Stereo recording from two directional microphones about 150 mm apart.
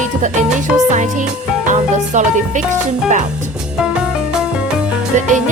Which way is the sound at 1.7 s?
55° right (ahead or behind).